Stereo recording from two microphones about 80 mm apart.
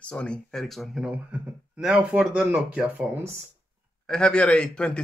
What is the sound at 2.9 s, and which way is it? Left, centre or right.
Speech, right.